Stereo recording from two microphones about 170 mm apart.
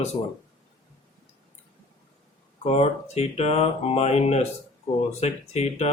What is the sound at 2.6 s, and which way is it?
Speech, 40° left (ahead or behind).